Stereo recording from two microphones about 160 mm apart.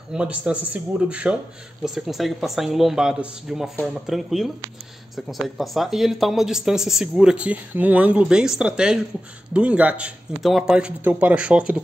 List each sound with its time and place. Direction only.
0.1 s a man's voice: 5° right (ahead or behind)